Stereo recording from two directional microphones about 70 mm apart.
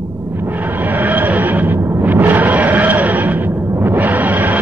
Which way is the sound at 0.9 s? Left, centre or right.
Right.